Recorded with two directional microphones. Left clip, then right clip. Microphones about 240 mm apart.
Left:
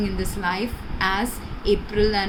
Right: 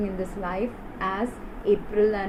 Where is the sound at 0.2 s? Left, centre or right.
Left.